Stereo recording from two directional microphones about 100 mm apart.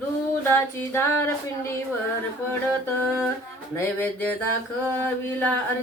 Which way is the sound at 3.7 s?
20° left (ahead or behind).